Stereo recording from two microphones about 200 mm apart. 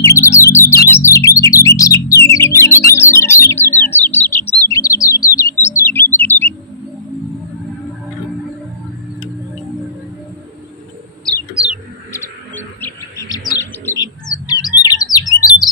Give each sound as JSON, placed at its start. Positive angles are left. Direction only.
{"t": 0.0, "sound": "a sound", "side_deg": 15}
{"t": 0.9, "sound": "bird", "side_deg": 15}
{"t": 2.2, "sound": "music", "side_deg": 15}
{"t": 2.9, "sound": "bird", "side_deg": 15}
{"t": 12.1, "sound": "bird", "side_deg": 10}